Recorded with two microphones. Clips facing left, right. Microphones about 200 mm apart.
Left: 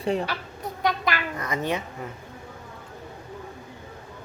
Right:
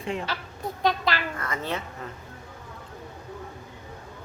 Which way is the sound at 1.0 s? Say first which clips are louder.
Even; 15° left (ahead or behind).